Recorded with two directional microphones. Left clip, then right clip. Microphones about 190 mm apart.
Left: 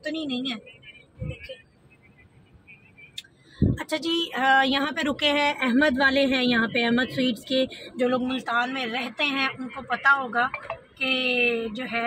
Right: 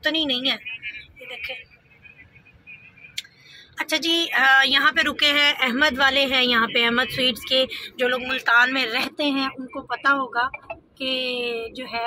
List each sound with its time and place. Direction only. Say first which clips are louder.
0.0 s speech: right 8 dB; centre (ahead or behind)
3.7 s speech: right 7 dB; 15° left (ahead or behind)
8.0 s speech: right 3 dB; centre (ahead or behind)